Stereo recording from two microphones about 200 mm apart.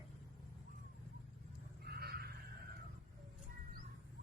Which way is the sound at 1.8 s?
50° right (ahead or behind).